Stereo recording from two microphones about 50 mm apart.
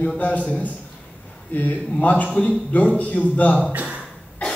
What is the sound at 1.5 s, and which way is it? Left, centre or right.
A man's voice, left.